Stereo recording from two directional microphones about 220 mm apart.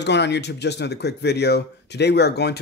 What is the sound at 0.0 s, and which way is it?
Speech, 50° left (ahead or behind).